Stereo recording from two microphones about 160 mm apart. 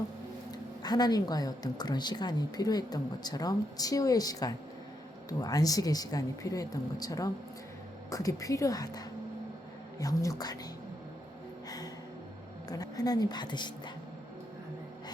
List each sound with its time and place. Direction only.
0.8 s a woman's voice: 25° left (ahead or behind)
10.0 s a woman's voice: 20° left (ahead or behind)
12.6 s a woman's voice: 25° left (ahead or behind)